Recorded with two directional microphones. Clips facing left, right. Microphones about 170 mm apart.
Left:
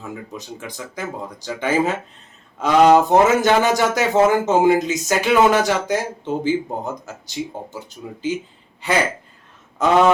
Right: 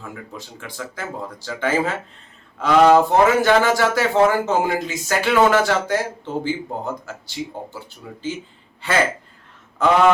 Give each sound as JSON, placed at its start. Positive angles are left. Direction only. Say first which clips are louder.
{"t": 0.3, "sound": "speech", "louder": "left 1 dB", "side_deg": 15}